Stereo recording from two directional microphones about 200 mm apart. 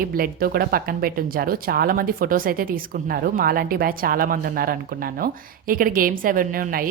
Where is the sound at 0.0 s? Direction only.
45° right (ahead or behind).